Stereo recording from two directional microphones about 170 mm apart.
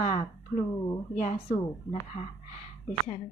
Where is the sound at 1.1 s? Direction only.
40° left (ahead or behind).